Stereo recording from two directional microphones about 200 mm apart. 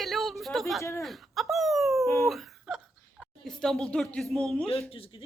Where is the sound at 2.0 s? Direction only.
15° left (ahead or behind).